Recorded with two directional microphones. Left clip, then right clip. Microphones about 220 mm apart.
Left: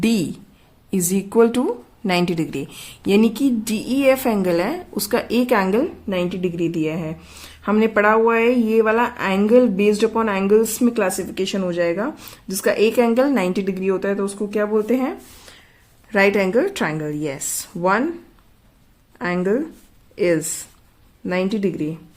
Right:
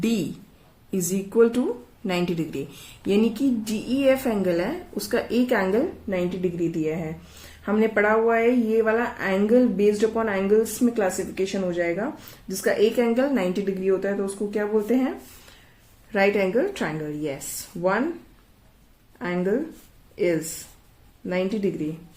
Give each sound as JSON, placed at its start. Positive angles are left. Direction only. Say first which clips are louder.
{"t": 0.0, "sound": "speech", "louder": "left 5 dB", "side_deg": 45}
{"t": 16.1, "sound": "speech", "louder": "left 4 dB", "side_deg": 50}
{"t": 19.2, "sound": "speech", "louder": "left 4 dB", "side_deg": 45}